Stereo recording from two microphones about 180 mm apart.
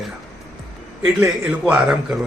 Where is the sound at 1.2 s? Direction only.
10° right (ahead or behind).